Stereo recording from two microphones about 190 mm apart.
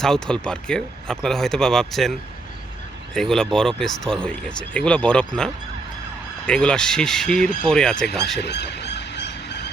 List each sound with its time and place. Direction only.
0.0 s speech: 5° left (ahead or behind)
3.2 s speech: 5° left (ahead or behind)
8.4 s squeal: 60° left (ahead or behind)